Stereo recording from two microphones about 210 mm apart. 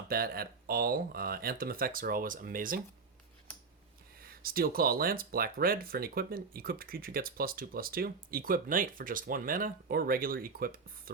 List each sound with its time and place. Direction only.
0.1 s speech: 45° right (ahead or behind)
4.2 s speech: 45° right (ahead or behind)